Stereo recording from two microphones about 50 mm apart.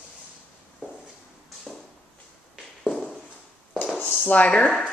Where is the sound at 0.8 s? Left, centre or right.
Right.